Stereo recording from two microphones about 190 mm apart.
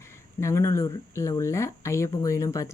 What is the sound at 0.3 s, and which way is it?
Speech, 15° left (ahead or behind).